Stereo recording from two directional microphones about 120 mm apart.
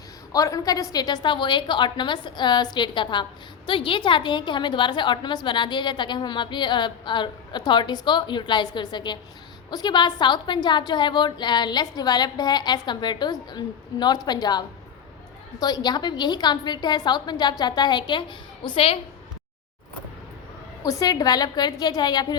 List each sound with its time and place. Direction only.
0.3 s a woman's voice: 30° left (ahead or behind)
15.6 s a woman's voice: 35° left (ahead or behind)
20.8 s a woman's voice: 30° left (ahead or behind)